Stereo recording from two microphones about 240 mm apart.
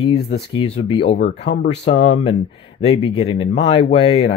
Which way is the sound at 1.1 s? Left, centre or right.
Left.